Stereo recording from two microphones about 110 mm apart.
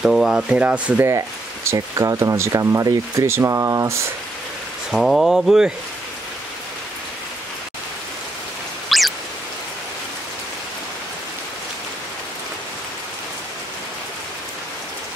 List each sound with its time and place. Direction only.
0.0 s speech: 5° right (ahead or behind)
1.0 s speech: 25° right (ahead or behind)
4.9 s speech: centre (ahead or behind)
8.8 s a sound: centre (ahead or behind)